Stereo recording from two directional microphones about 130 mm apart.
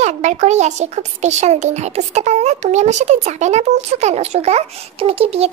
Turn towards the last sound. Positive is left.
turn(degrees=-50)  # may be behind; listen again after turning